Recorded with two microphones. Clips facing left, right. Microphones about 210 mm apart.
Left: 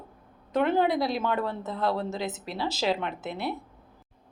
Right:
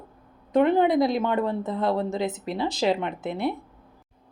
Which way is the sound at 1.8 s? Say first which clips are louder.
Right 2 dB; 20° right (ahead or behind).